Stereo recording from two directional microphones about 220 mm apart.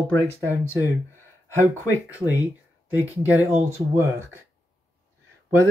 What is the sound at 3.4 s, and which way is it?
Speech, 10° right (ahead or behind).